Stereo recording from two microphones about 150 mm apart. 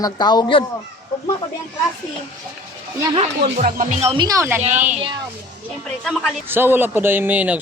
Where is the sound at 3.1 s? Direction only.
45° right (ahead or behind).